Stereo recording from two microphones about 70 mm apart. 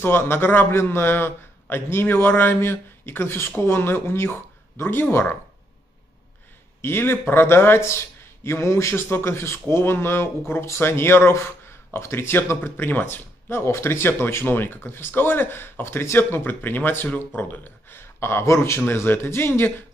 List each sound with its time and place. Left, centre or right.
0.0 s a man's voice: left
6.8 s a man's voice: left